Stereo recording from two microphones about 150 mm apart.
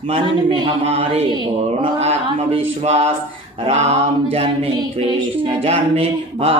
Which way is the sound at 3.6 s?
45° right (ahead or behind).